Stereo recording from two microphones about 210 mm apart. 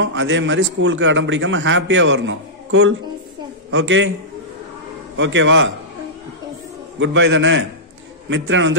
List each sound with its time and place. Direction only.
0.0 s a man's voice: 65° right (ahead or behind)
5.1 s a man's voice: 65° right (ahead or behind)
7.0 s a man's voice: 65° right (ahead or behind)